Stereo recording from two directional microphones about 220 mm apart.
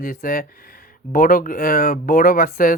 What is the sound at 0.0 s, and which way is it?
Speech, 40° left (ahead or behind).